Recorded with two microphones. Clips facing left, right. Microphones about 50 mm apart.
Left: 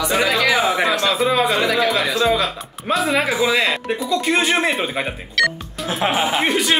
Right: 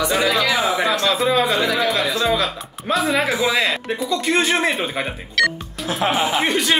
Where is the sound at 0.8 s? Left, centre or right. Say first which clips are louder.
Even; centre.